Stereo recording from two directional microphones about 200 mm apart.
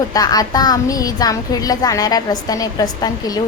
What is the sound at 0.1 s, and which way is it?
A woman's voice, 20° left (ahead or behind).